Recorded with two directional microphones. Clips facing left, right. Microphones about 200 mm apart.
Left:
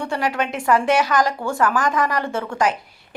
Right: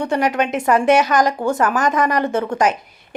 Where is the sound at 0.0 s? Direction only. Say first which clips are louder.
Right 5 dB; 20° right (ahead or behind).